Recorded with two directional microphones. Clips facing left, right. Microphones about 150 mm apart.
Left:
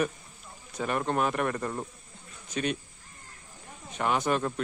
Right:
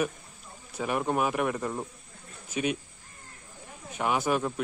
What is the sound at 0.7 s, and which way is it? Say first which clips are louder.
Speech: right 1 dB; 10° right (ahead or behind).